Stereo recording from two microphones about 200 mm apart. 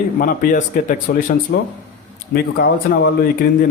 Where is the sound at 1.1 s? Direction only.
60° left (ahead or behind).